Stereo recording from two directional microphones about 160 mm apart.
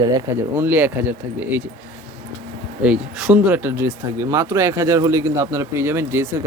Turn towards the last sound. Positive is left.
turn(degrees=-15)  # may be behind; listen again after turning